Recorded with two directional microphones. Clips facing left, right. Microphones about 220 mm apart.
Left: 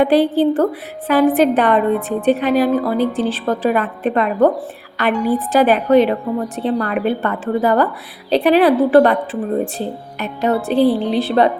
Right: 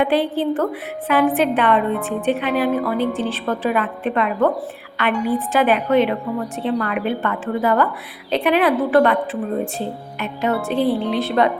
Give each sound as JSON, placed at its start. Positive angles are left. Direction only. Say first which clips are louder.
{"t": 0.0, "sound": "a woman's voice", "louder": "left 5 dB", "side_deg": 35}